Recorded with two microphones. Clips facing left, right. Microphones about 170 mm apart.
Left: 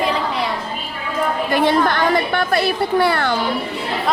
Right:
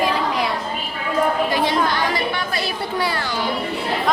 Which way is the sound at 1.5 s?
55° left (ahead or behind).